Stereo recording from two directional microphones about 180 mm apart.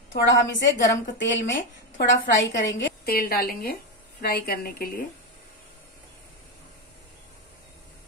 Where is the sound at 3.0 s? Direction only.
55° left (ahead or behind).